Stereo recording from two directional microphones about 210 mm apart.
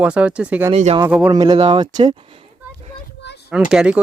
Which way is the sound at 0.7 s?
30° right (ahead or behind).